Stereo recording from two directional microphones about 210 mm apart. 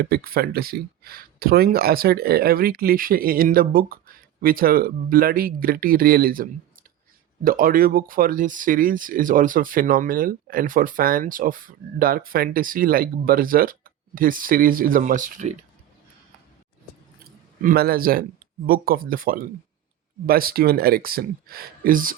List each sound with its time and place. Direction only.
0.0 s speech: 45° right (ahead or behind)
17.6 s speech: 45° right (ahead or behind)